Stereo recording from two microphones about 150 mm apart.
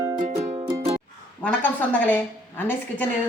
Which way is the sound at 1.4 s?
10° left (ahead or behind).